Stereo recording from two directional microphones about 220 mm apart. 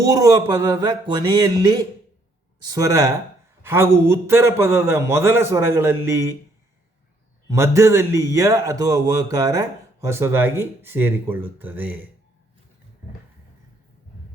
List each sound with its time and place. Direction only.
0.0 s a man's voice: 15° right (ahead or behind)
7.5 s a man's voice: 10° right (ahead or behind)